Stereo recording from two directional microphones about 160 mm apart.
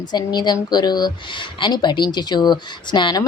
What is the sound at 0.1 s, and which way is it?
A woman's voice, 25° left (ahead or behind).